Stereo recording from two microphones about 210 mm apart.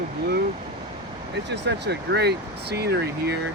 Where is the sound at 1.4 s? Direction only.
55° right (ahead or behind).